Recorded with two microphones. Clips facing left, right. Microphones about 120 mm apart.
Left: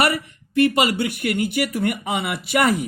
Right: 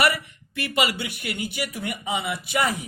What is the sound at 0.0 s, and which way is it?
Speech, 40° left (ahead or behind).